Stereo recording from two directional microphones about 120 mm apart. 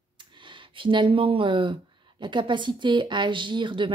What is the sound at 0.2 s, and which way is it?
Speech, 40° right (ahead or behind).